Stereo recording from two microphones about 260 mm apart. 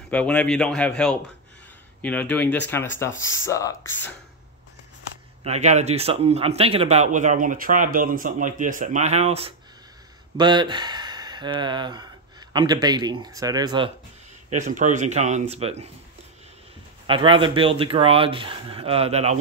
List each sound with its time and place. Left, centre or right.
0.1 s speech: centre
5.4 s speech: right
14.5 s speech: right
17.0 s speech: centre